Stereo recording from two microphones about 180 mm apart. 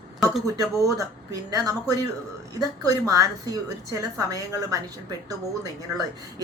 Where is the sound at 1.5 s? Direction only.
20° right (ahead or behind).